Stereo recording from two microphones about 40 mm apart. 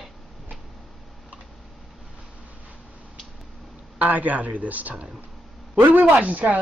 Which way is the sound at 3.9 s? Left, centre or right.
Right.